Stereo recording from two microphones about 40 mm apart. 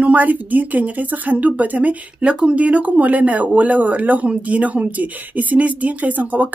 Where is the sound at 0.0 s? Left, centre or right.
Right.